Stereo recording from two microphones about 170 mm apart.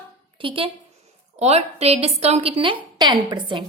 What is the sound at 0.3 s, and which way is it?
A woman's voice, 30° right (ahead or behind).